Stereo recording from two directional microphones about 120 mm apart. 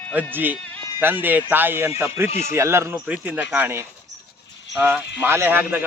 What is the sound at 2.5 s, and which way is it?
A man's voice, 25° right (ahead or behind).